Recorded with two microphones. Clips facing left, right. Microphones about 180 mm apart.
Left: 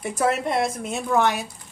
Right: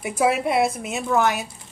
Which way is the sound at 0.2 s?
10° right (ahead or behind).